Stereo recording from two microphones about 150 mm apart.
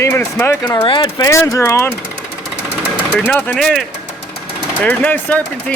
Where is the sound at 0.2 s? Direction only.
15° left (ahead or behind).